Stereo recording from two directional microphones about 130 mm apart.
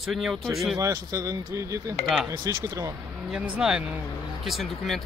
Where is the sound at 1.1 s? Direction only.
25° right (ahead or behind).